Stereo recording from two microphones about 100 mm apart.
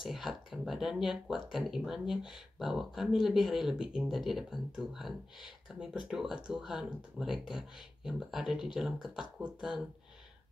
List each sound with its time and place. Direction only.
0.0 s speech: 5° right (ahead or behind)